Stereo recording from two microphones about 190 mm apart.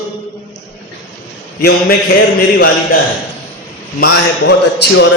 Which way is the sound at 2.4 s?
50° left (ahead or behind).